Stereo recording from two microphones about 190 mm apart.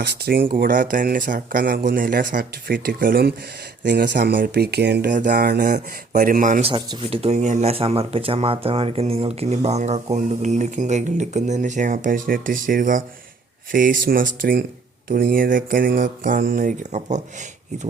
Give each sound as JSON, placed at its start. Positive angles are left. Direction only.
{"t": 0.0, "sound": "speech", "side_deg": -60}
{"t": 3.8, "sound": "speech", "side_deg": -65}
{"t": 4.4, "sound": "speech", "side_deg": -55}
{"t": 5.1, "sound": "speech", "side_deg": -45}
{"t": 6.7, "sound": "speech", "side_deg": -30}